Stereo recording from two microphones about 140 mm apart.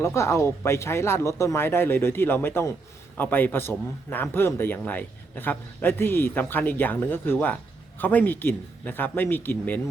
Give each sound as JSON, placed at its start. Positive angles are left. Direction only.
{"t": 0.0, "sound": "a man's voice", "side_deg": 20}